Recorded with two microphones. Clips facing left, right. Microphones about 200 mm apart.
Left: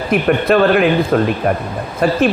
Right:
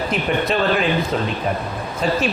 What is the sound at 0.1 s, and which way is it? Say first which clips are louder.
A man's voice: left 10 dB; 55° left (ahead or behind).